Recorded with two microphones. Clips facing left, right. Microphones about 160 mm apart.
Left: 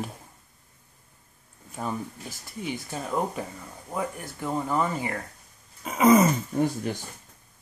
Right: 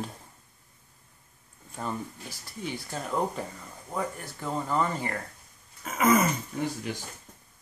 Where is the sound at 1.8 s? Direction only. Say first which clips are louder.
Left 2 dB; 5° left (ahead or behind).